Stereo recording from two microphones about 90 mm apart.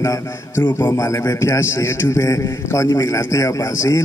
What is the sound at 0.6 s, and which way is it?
Speech, 25° left (ahead or behind).